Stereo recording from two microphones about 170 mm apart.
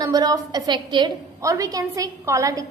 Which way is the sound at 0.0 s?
25° right (ahead or behind).